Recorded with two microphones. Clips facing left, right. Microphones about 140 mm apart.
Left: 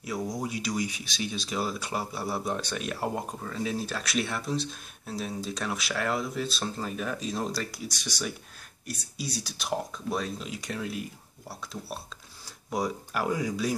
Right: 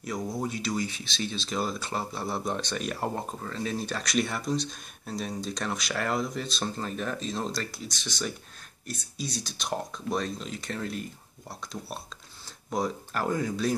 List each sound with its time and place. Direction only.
0.0 s speech: 10° left (ahead or behind)
12.7 s speech: 10° left (ahead or behind)